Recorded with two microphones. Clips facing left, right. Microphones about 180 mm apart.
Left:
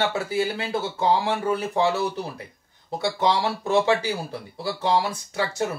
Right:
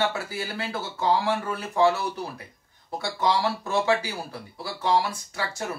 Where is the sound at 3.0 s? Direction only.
20° left (ahead or behind).